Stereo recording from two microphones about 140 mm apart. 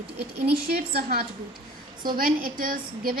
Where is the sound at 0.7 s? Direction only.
90° right.